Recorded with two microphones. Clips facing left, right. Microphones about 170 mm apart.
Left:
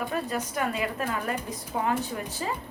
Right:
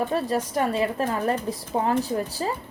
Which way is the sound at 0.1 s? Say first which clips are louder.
Right 5 dB; 35° right (ahead or behind).